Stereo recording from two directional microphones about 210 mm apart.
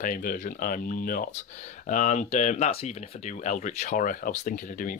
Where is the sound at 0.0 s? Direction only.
40° left (ahead or behind).